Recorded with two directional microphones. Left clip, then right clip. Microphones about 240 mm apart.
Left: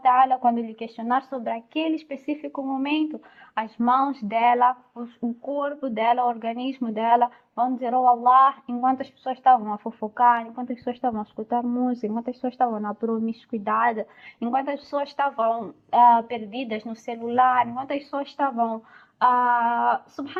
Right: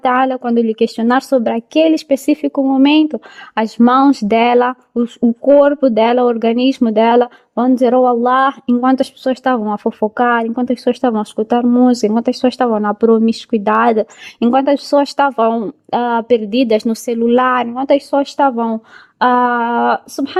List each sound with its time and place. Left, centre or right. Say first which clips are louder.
0.0 s a woman's voice: right 4 dB; right